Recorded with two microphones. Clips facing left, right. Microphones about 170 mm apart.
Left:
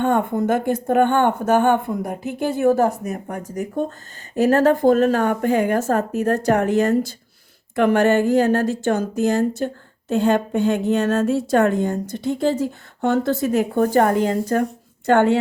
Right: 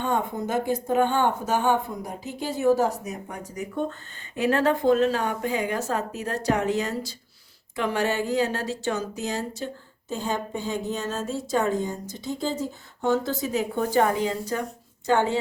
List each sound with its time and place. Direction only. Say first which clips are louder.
0.0 s speech: left 7 dB; 55° left (ahead or behind)